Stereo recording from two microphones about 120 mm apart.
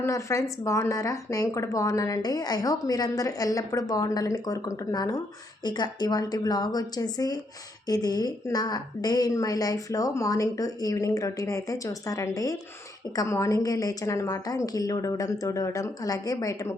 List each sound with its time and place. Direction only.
0.0 s speech: 25° left (ahead or behind)